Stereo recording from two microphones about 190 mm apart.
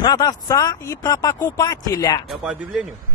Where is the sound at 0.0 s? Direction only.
20° left (ahead or behind).